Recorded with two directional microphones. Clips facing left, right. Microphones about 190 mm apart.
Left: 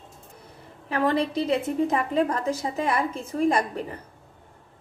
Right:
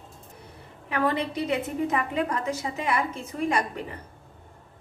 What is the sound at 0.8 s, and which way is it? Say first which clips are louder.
A woman's voice: left 3 dB; 35° left (ahead or behind).